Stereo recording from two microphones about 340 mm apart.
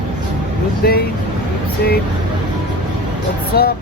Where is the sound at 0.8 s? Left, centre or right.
Left.